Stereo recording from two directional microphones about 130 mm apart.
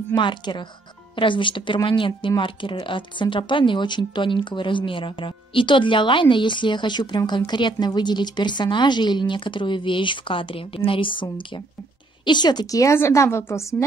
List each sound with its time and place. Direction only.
0.1 s a woman's voice: 35° left (ahead or behind)